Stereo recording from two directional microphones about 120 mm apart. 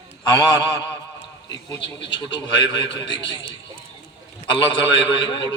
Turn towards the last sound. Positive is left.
turn(degrees=45)  # may be behind; listen again after turning